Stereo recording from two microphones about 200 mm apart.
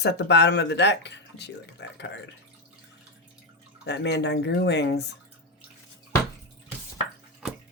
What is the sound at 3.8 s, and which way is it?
Speech, 60° left (ahead or behind).